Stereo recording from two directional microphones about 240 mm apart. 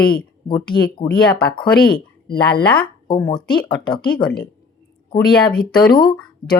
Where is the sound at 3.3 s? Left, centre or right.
Centre.